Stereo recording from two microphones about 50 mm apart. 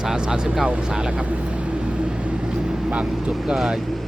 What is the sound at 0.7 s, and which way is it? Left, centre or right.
Vehicle, centre.